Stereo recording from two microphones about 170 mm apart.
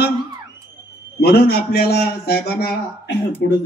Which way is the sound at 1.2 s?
70° left (ahead or behind).